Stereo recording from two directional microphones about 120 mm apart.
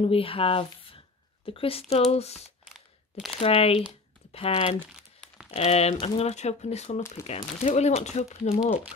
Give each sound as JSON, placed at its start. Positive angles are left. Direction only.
{"t": 0.0, "sound": "speech", "side_deg": 50}
{"t": 2.6, "sound": "crunch", "side_deg": 0}
{"t": 3.3, "sound": "speech", "side_deg": 50}